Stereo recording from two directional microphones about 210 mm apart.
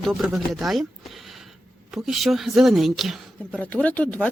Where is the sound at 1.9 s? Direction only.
Centre (ahead or behind).